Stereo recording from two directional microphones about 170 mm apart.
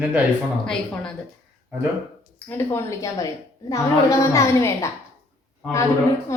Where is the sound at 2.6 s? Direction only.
15° left (ahead or behind).